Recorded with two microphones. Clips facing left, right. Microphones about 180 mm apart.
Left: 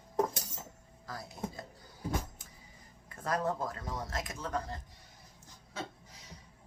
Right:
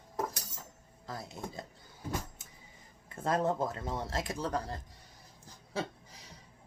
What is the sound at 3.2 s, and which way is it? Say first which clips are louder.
Speech: right 3 dB; 25° right (ahead or behind).